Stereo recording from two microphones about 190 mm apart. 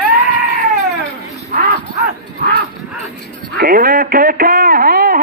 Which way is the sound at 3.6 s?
50° right (ahead or behind).